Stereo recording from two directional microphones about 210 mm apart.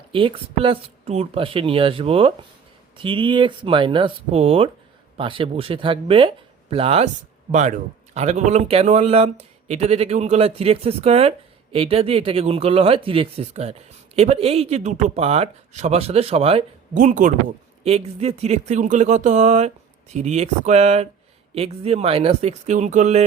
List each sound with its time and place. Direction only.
0.1 s speech: 25° right (ahead or behind)